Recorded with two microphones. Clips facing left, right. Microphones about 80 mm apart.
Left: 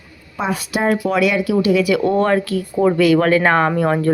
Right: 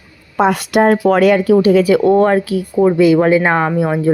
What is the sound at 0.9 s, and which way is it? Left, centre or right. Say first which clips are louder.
Speech: right 5 dB; right.